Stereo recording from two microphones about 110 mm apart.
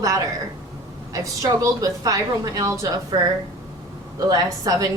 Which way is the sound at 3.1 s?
45° right (ahead or behind).